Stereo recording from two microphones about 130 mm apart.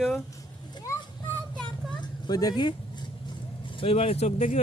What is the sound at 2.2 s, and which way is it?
Speech, 30° left (ahead or behind).